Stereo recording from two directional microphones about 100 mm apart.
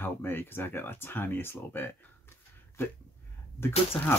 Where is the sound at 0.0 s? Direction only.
20° left (ahead or behind).